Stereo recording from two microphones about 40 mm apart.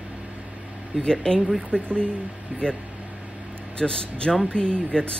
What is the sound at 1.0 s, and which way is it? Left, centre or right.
A man's voice, left.